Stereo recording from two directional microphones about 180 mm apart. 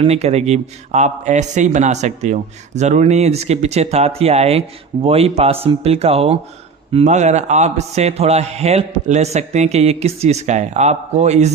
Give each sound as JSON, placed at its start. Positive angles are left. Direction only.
{"t": 0.0, "sound": "a man's voice", "side_deg": -35}